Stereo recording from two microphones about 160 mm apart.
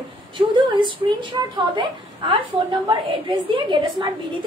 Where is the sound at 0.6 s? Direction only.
30° right (ahead or behind).